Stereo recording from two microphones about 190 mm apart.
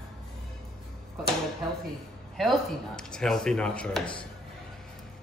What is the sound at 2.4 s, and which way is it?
Speech, centre (ahead or behind).